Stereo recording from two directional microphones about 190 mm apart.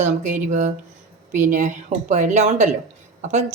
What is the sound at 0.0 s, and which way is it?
Speech, 40° right (ahead or behind).